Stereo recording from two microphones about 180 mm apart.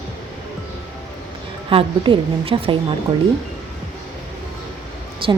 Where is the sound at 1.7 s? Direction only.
30° right (ahead or behind).